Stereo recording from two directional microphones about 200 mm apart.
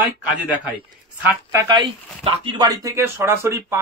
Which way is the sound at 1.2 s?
15° right (ahead or behind).